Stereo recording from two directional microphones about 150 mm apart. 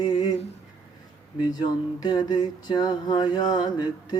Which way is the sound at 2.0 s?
30° left (ahead or behind).